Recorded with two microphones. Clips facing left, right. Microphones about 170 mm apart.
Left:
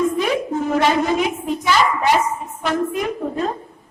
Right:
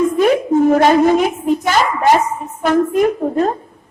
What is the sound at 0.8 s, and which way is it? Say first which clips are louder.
A woman's voice: right 6 dB; 45° right (ahead or behind).